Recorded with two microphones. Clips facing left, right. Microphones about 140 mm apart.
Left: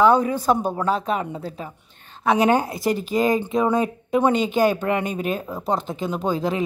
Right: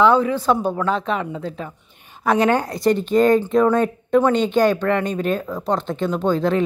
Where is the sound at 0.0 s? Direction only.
40° left (ahead or behind).